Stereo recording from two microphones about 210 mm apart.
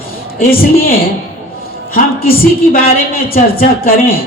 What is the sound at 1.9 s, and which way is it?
A man's voice, 45° left (ahead or behind).